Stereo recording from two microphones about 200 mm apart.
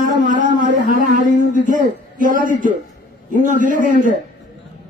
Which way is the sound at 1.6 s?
40° right (ahead or behind).